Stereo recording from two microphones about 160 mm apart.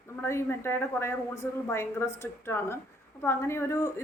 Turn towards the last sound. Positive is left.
turn(degrees=15)  # may be behind; listen again after turning